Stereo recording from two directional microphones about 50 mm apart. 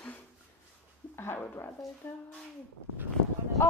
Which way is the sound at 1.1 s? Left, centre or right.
Left.